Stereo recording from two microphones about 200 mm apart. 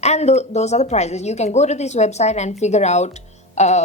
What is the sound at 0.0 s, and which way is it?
A woman's voice, 35° left (ahead or behind).